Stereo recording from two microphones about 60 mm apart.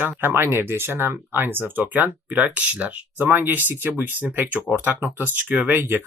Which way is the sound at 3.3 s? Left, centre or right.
Right.